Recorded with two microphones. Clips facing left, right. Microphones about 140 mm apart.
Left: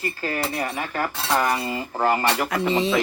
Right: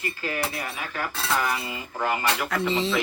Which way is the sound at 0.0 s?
40° left (ahead or behind).